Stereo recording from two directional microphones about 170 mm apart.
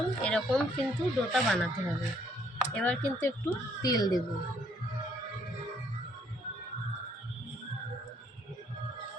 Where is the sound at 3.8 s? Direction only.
20° left (ahead or behind).